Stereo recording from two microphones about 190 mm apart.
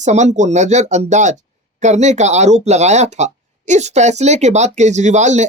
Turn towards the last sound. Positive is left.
turn(degrees=-40)  # may be behind; listen again after turning